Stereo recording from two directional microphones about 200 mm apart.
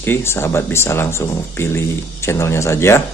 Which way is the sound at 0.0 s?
10° left (ahead or behind).